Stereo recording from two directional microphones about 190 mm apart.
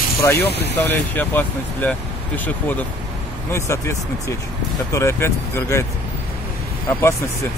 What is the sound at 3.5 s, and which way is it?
Speech, 15° left (ahead or behind).